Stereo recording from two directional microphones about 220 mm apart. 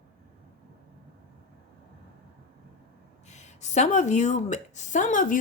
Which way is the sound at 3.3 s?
30° left (ahead or behind).